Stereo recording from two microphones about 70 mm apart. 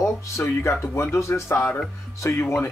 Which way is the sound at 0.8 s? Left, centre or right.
Left.